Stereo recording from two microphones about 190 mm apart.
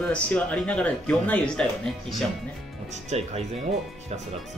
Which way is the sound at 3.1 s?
35° right (ahead or behind).